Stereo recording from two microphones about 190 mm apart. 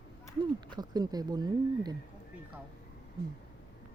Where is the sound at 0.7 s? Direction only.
20° right (ahead or behind).